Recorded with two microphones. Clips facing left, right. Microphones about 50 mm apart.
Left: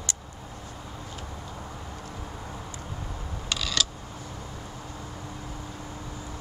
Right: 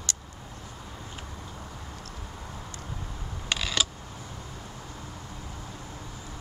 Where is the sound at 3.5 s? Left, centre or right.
Centre.